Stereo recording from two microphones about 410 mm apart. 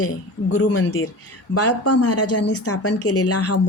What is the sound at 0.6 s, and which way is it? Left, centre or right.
Speech, left.